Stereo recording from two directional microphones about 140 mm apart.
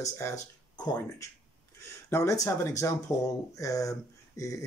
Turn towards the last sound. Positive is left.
turn(degrees=25)  # may be behind; listen again after turning